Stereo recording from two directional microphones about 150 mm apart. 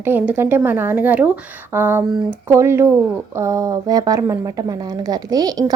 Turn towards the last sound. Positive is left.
turn(degrees=-25)  # may be behind; listen again after turning